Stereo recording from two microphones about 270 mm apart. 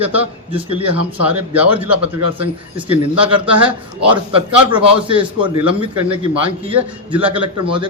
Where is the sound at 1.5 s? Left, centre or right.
Centre.